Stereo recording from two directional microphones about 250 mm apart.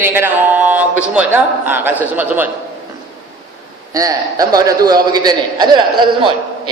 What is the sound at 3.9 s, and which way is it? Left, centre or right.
A man's voice, centre.